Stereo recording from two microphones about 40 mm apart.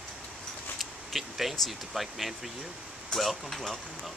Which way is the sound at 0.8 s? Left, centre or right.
Centre.